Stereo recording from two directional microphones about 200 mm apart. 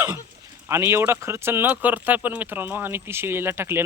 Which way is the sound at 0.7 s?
10° right (ahead or behind).